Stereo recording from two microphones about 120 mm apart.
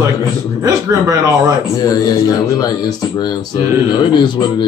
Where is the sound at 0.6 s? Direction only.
30° right (ahead or behind).